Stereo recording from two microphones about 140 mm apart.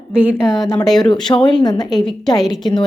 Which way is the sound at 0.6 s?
25° left (ahead or behind).